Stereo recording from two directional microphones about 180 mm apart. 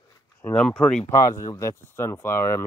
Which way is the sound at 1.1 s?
20° left (ahead or behind).